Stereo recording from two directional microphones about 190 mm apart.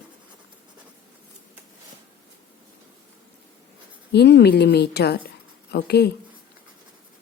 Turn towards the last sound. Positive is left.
turn(degrees=60)  # may be behind; listen again after turning